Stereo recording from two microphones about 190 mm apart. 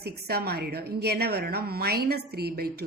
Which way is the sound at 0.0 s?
55° right (ahead or behind).